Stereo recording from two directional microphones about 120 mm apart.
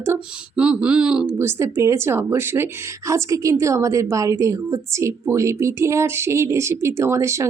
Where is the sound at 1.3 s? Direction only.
20° right (ahead or behind).